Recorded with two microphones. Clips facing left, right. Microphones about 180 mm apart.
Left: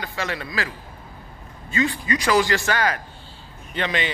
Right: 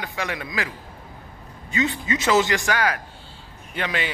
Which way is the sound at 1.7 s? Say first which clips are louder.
Left 1 dB; 20° right (ahead or behind).